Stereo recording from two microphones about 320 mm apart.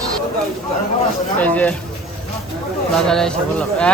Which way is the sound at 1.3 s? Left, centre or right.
Centre.